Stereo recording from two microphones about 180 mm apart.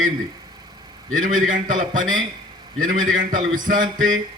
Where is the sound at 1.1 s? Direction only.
45° right (ahead or behind).